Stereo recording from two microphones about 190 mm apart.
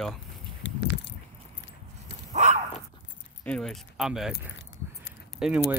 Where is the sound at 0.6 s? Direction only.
70° left (ahead or behind).